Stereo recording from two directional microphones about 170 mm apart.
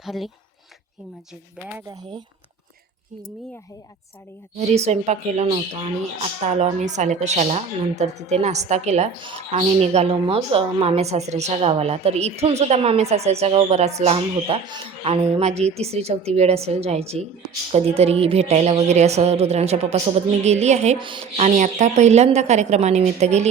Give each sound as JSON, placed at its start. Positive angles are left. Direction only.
{"t": 0.0, "sound": "speech", "side_deg": 0}
{"t": 1.9, "sound": "speech", "side_deg": -25}
{"t": 4.5, "sound": "a woman's voice", "side_deg": -40}
{"t": 9.1, "sound": "a woman's voice", "side_deg": -30}
{"t": 21.0, "sound": "a woman's voice", "side_deg": -30}